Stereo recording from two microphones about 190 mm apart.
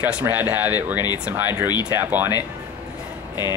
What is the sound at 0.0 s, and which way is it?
Speech, 10° right (ahead or behind).